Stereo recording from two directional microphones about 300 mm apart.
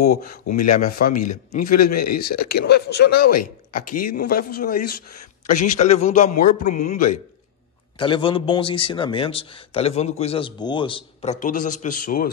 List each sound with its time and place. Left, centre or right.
0.0 s a man's voice: left
1.9 s speech: left
2.1 s a man's voice: left